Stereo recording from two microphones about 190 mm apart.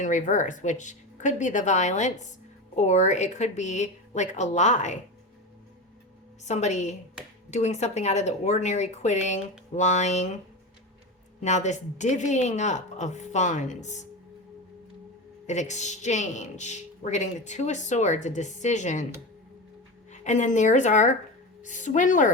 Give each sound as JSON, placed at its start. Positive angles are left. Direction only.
{"t": 0.0, "sound": "a woman's voice", "side_deg": 40}
{"t": 6.4, "sound": "a woman's voice", "side_deg": 35}
{"t": 11.3, "sound": "a woman's voice", "side_deg": 40}
{"t": 15.4, "sound": "a woman's voice", "side_deg": 40}
{"t": 20.1, "sound": "a woman's voice", "side_deg": 40}